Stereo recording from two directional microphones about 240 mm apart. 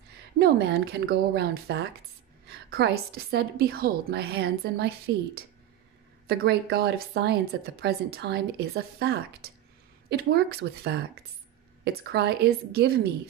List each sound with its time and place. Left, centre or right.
0.4 s a woman's voice: right